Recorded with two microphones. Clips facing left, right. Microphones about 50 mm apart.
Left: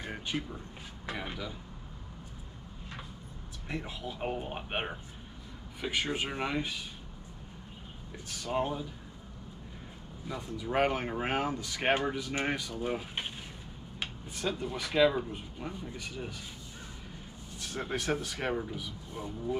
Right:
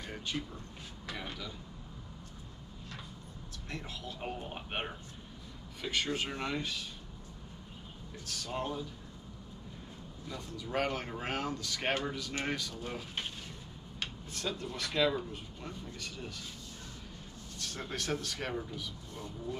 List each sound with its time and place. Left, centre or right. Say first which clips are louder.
0.0 s speech: left 3 dB; centre
3.6 s speech: left 5 dB; centre
8.3 s speech: left 5 dB; centre
10.2 s speech: left 6 dB; centre
17.6 s speech: left 4 dB; centre